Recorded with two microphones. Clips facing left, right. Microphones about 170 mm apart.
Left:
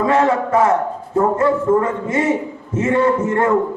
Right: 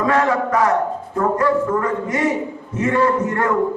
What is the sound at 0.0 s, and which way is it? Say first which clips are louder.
A man's voice: left 2 dB; 25° left (ahead or behind).